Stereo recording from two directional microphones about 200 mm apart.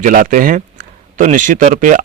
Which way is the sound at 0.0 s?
40° right (ahead or behind).